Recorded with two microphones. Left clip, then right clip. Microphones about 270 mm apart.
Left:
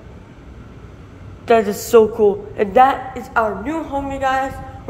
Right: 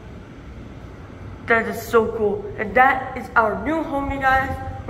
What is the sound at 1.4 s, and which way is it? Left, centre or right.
A woman's voice, left.